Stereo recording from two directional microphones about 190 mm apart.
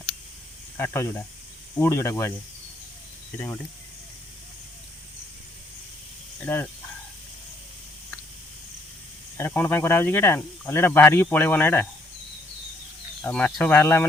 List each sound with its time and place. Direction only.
0.8 s speech: 15° left (ahead or behind)
6.4 s speech: 10° left (ahead or behind)
9.4 s speech: 10° left (ahead or behind)
13.2 s speech: 5° left (ahead or behind)